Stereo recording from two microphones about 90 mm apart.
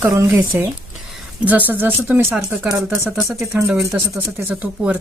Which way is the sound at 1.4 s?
20° right (ahead or behind).